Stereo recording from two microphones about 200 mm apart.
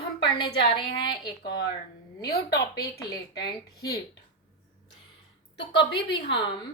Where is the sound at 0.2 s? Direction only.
20° left (ahead or behind).